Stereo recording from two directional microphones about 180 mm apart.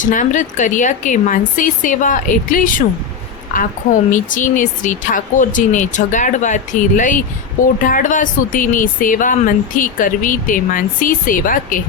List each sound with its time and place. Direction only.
0.0 s speech: 45° left (ahead or behind)
4.1 s speech: 45° left (ahead or behind)